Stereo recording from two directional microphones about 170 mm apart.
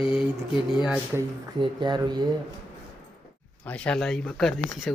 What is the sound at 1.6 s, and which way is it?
Speech, 25° right (ahead or behind).